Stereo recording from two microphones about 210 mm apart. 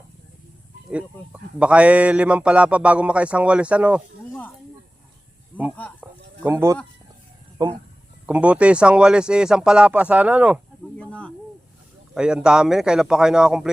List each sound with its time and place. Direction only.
0.9 s speech: 5° right (ahead or behind)
6.0 s a sound: 10° right (ahead or behind)
7.6 s speech: 20° right (ahead or behind)
8.3 s speech: 5° right (ahead or behind)
10.9 s snake: 5° left (ahead or behind)
12.1 s speech: 5° right (ahead or behind)